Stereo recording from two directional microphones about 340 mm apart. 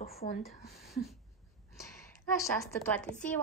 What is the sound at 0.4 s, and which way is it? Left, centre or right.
Speech, centre.